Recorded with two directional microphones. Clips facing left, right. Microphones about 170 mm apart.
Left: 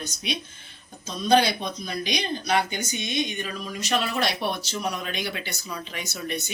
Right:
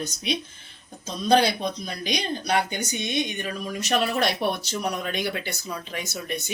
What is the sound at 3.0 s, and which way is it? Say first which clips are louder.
Speech: right 1 dB; 55° right (ahead or behind).